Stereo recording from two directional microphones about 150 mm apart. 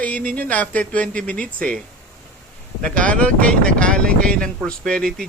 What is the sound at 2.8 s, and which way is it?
Speech, 5° left (ahead or behind).